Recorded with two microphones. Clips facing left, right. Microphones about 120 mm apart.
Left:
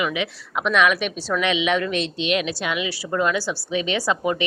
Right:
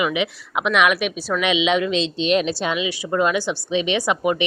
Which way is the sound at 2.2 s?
35° right (ahead or behind).